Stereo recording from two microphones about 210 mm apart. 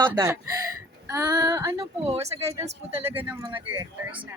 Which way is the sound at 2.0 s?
30° right (ahead or behind).